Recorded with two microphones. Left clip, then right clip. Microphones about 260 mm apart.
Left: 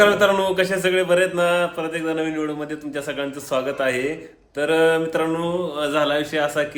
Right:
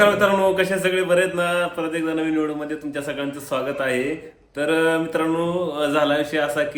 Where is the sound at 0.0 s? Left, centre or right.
Centre.